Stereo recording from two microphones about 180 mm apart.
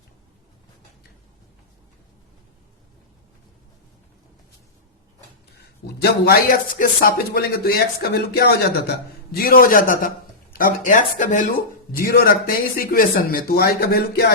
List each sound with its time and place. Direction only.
6.0 s speech: 60° left (ahead or behind)